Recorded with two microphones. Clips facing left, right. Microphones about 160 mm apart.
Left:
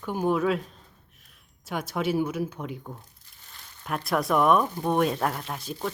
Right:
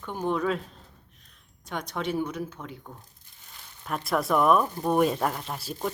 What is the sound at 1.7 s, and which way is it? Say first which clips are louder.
Speech: left 3 dB; 5° left (ahead or behind).